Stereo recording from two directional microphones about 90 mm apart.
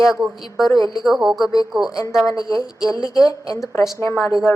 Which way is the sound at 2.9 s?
40° left (ahead or behind).